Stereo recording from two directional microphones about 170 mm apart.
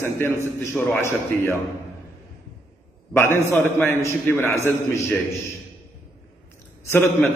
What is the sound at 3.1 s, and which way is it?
A man's voice, 15° left (ahead or behind).